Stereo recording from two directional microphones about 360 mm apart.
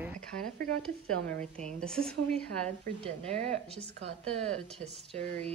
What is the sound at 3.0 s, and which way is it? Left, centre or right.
Speech, centre.